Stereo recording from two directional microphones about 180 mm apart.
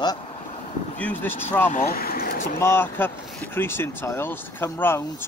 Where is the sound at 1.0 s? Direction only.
10° left (ahead or behind).